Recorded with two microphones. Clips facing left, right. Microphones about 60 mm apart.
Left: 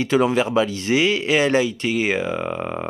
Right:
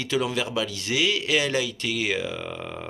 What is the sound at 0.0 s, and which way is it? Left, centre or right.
Speech, left.